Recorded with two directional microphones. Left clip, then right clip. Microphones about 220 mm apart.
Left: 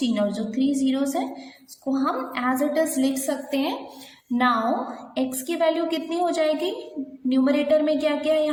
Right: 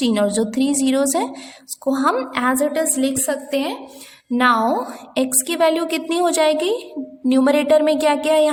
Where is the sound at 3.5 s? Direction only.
30° right (ahead or behind).